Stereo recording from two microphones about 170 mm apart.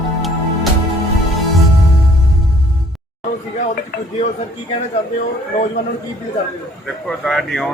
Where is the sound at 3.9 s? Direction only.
65° left (ahead or behind).